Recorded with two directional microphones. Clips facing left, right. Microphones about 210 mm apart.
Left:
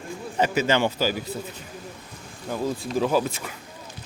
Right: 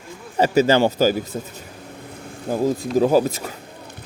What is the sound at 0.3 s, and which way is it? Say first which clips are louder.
Speech: right 6 dB; 35° right (ahead or behind).